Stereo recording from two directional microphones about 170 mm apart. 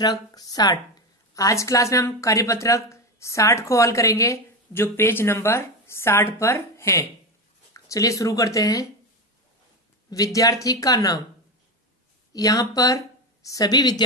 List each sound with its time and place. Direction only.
0.0 s a woman's voice: 20° left (ahead or behind)
10.0 s speech: 20° left (ahead or behind)
12.3 s speech: 20° left (ahead or behind)